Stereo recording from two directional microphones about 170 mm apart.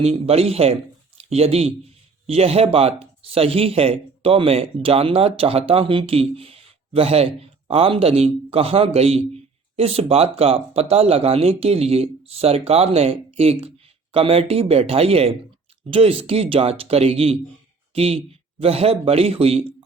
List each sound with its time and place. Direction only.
0.0 s speech: 40° right (ahead or behind)